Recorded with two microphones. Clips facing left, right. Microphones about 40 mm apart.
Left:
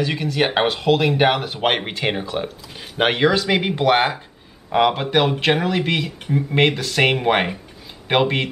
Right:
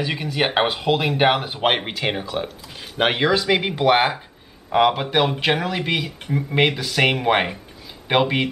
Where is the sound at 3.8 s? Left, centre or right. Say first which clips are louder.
Even; centre.